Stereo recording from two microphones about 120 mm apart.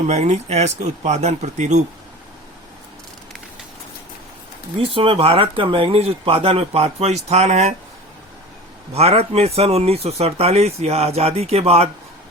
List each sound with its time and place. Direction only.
0.1 s speech: 70° right (ahead or behind)
4.8 s speech: 50° right (ahead or behind); by 7.8 s 75° right (ahead or behind)
8.9 s speech: 55° right (ahead or behind)